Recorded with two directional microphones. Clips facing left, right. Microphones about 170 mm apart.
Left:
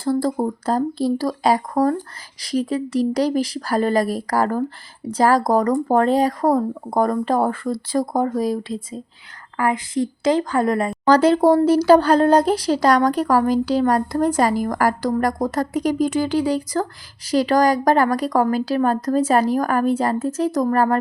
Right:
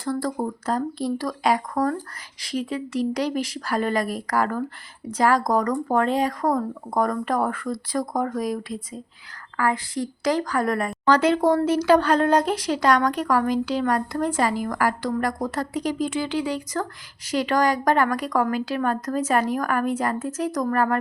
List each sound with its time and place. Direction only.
0.0 s a woman's voice: 30° left (ahead or behind)
11.0 s speech: 35° left (ahead or behind)